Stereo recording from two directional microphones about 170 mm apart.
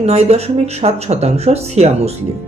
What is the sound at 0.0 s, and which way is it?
Speech, 40° right (ahead or behind).